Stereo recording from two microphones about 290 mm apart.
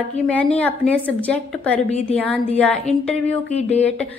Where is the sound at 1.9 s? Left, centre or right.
Left.